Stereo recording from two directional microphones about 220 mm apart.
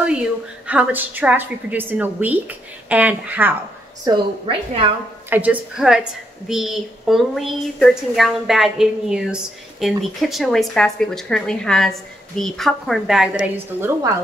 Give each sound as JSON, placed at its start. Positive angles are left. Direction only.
{"t": 0.0, "sound": "a woman's voice", "side_deg": -5}
{"t": 4.0, "sound": "a woman's voice", "side_deg": -20}
{"t": 5.3, "sound": "a woman's voice", "side_deg": -5}